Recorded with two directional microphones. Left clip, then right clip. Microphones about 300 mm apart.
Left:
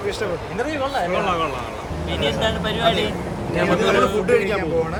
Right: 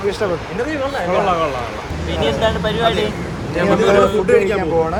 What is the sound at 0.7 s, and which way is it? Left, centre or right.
Speech, centre.